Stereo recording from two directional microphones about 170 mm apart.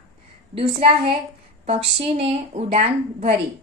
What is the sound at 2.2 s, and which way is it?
A woman's voice, 35° right (ahead or behind).